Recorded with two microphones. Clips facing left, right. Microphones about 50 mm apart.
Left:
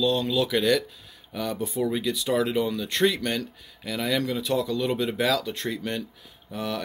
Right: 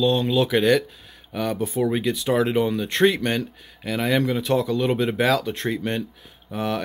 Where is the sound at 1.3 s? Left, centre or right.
Right.